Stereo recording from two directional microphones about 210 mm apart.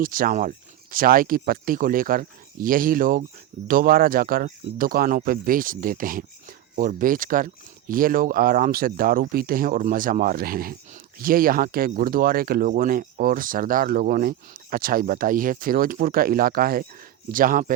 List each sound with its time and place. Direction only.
0.0 s speech: 40° right (ahead or behind)